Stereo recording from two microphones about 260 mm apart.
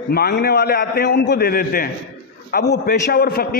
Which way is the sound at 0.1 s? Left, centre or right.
Left.